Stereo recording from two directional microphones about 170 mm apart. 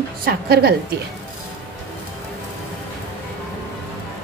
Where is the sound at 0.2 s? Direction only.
65° right (ahead or behind).